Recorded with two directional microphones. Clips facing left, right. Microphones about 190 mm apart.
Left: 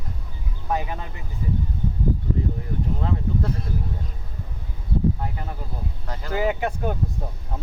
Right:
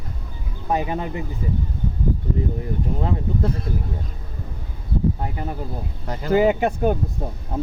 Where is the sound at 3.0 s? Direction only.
20° right (ahead or behind).